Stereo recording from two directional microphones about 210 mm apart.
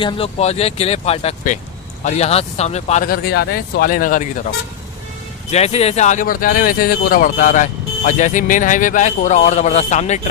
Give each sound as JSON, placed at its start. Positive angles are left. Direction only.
{"t": 0.0, "sound": "speech", "side_deg": 25}
{"t": 5.5, "sound": "speech", "side_deg": 30}